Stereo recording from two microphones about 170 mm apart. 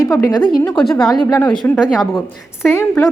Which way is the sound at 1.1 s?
20° left (ahead or behind).